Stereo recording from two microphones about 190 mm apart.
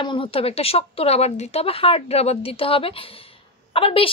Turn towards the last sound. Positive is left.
turn(degrees=30)  # may be behind; listen again after turning